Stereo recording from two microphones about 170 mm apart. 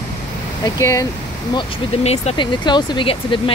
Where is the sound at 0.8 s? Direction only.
20° left (ahead or behind).